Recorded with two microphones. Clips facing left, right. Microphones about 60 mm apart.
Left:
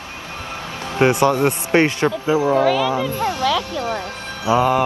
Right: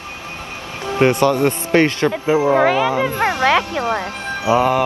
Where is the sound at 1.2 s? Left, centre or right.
Centre.